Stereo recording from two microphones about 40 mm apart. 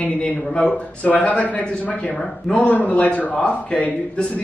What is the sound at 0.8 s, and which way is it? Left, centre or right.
A man's voice, left.